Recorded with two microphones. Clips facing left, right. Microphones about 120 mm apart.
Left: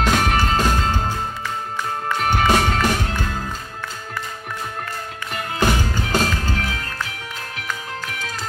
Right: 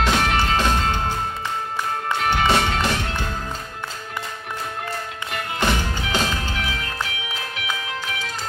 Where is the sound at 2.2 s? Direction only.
45° left (ahead or behind).